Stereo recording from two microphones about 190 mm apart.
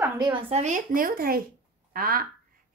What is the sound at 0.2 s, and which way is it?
A woman's voice, 25° right (ahead or behind).